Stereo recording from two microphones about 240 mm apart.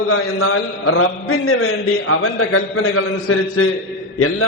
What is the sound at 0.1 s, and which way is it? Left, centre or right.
A man's voice, left.